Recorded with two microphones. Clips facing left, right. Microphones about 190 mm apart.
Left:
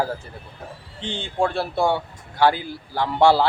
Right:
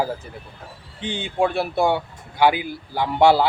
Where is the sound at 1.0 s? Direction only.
15° right (ahead or behind).